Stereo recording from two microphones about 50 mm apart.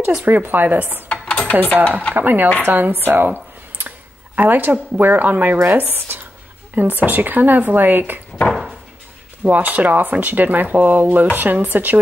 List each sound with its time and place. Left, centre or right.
0.2 s speech: right
1.1 s dishes: left
2.1 s speech: right
3.1 s a sound: right
4.4 s speech: right
5.6 s a woman's voice: right
9.4 s speech: right